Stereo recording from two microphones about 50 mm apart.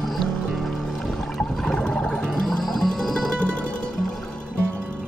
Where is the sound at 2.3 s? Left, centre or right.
Centre.